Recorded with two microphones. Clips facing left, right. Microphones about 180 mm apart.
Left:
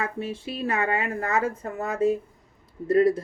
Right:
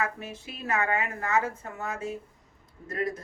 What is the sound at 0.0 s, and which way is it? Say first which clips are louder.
Speech: left 3 dB; 30° left (ahead or behind).